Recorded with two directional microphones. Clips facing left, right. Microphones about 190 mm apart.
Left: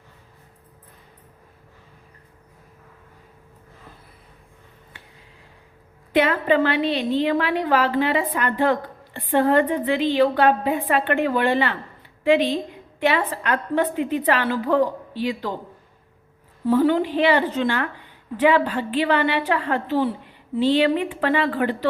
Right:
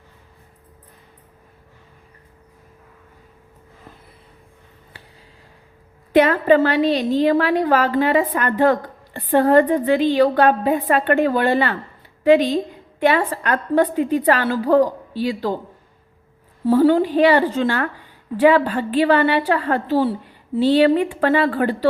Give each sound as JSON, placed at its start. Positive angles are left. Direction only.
{"t": 4.9, "sound": "a sound", "side_deg": -35}
{"t": 6.1, "sound": "a woman's voice", "side_deg": -45}
{"t": 16.6, "sound": "a woman's voice", "side_deg": -35}